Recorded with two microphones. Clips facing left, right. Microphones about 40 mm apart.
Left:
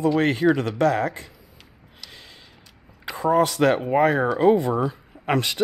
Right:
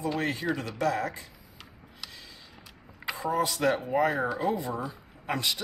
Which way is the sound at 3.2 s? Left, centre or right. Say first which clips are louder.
Left 8 dB; left.